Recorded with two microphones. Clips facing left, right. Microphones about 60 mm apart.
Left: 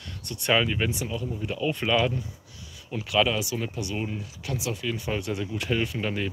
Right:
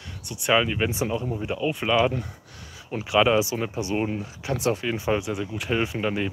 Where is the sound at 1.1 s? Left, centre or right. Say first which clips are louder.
Right 4 dB; right.